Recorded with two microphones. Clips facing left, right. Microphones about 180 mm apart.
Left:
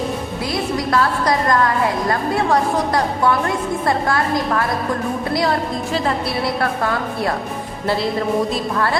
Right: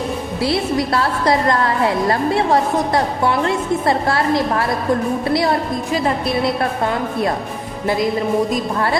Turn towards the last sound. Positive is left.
turn(degrees=-20)  # may be behind; listen again after turning